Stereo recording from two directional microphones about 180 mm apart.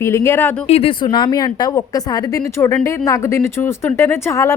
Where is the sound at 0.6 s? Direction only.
35° left (ahead or behind).